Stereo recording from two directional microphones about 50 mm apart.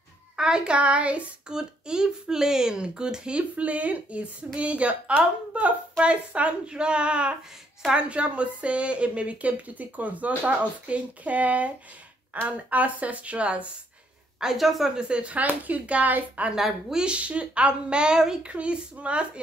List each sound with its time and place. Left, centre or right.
0.4 s speech: centre
0.7 s speech: right
1.5 s speech: centre
14.4 s a woman's voice: centre
15.0 s speech: right
18.4 s speech: right